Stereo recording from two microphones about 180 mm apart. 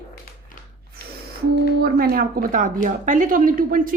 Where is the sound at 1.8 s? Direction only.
55° right (ahead or behind).